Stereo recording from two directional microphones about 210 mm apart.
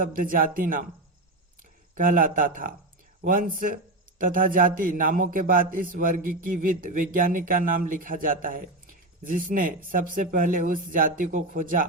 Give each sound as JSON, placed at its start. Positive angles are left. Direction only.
{"t": 0.0, "sound": "a man's voice", "side_deg": -40}
{"t": 2.0, "sound": "a man's voice", "side_deg": -40}